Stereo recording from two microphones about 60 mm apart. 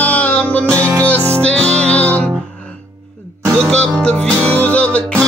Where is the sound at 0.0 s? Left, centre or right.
Left.